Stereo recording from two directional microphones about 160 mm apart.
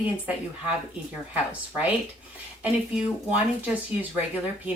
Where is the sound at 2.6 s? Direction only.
10° right (ahead or behind).